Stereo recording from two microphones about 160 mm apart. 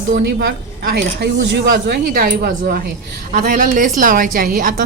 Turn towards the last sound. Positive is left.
turn(degrees=-60)  # may be behind; listen again after turning